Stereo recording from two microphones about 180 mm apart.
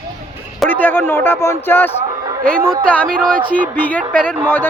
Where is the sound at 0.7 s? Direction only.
10° left (ahead or behind).